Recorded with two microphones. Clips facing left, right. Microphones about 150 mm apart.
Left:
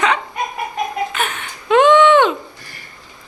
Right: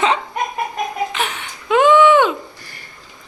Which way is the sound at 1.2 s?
10° right (ahead or behind).